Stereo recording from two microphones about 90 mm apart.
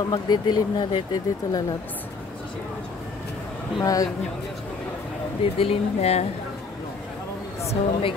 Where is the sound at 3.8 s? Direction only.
40° left (ahead or behind).